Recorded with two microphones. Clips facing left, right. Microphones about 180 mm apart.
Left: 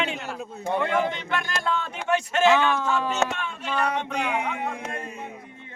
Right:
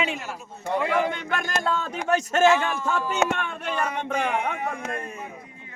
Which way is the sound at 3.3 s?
55° right (ahead or behind).